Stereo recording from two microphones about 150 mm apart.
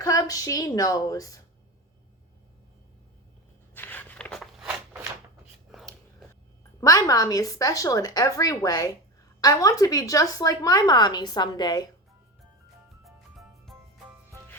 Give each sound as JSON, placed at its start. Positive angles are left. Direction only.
{"t": 0.0, "sound": "a woman's voice", "side_deg": 25}
{"t": 3.8, "sound": "a sound", "side_deg": 10}
{"t": 5.7, "sound": "scissors", "side_deg": 0}
{"t": 6.7, "sound": "a woman's voice", "side_deg": 20}
{"t": 13.7, "sound": "music", "side_deg": 0}